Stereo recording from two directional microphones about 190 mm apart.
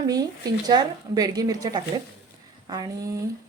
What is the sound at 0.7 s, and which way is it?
Speech, 20° right (ahead or behind).